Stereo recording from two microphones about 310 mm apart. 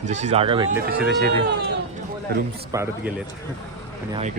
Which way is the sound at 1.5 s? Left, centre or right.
Right.